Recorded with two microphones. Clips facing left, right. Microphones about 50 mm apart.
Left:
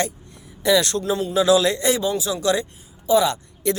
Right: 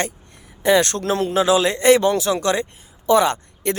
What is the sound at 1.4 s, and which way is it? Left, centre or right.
Speech, right.